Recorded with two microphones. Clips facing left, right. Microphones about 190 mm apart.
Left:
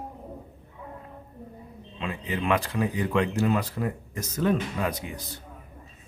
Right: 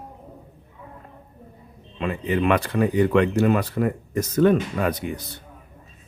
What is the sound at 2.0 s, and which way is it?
Speech, 60° right (ahead or behind).